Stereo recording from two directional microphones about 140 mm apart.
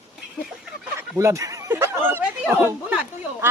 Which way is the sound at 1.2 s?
20° right (ahead or behind).